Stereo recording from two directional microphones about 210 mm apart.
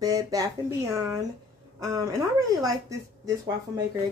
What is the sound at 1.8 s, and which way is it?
Speech, 15° right (ahead or behind).